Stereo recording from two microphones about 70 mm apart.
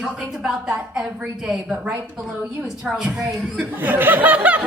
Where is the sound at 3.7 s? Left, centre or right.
Right.